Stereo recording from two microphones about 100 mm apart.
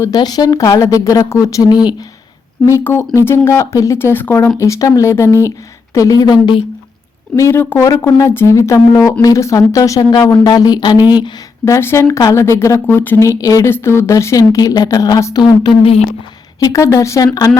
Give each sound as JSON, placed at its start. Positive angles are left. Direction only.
{"t": 0.0, "sound": "a woman's voice", "side_deg": 40}
{"t": 7.3, "sound": "speech", "side_deg": 25}
{"t": 7.9, "sound": "a woman's voice", "side_deg": 35}
{"t": 11.6, "sound": "speech", "side_deg": 25}
{"t": 13.7, "sound": "a woman's voice", "side_deg": 25}
{"t": 16.6, "sound": "a woman's voice", "side_deg": 35}